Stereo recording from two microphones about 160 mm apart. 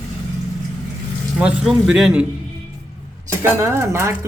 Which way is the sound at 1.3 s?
5° right (ahead or behind).